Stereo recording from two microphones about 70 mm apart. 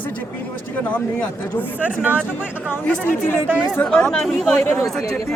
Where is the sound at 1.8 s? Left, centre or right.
Right.